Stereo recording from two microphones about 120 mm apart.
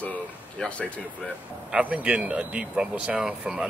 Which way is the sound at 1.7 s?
10° right (ahead or behind).